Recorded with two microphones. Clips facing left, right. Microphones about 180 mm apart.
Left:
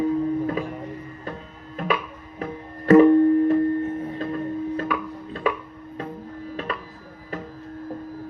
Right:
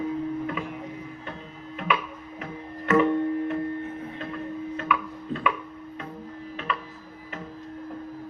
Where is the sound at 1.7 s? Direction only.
40° left (ahead or behind).